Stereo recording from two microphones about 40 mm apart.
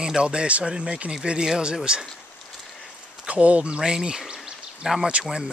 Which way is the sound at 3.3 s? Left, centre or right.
Right.